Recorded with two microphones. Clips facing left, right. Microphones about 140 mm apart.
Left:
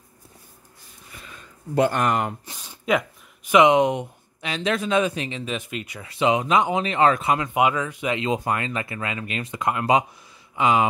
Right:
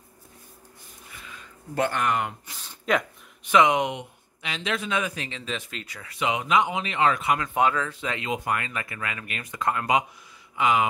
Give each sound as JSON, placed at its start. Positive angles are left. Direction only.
{"t": 1.9, "sound": "speech", "side_deg": 40}
{"t": 2.6, "sound": "a sound", "side_deg": 10}
{"t": 3.7, "sound": "speech", "side_deg": 40}
{"t": 7.3, "sound": "speech", "side_deg": 15}
{"t": 8.3, "sound": "speech", "side_deg": 30}
{"t": 10.6, "sound": "speech", "side_deg": 30}